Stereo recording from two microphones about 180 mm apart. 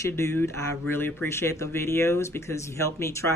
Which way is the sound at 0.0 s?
15° left (ahead or behind).